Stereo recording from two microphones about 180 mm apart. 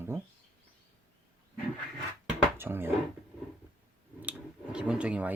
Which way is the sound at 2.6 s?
10° right (ahead or behind).